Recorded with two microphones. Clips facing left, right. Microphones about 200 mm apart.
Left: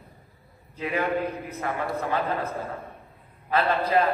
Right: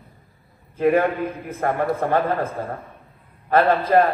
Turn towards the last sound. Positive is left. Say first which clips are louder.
# right 6 dB
turn(degrees=-50)  # may be behind; listen again after turning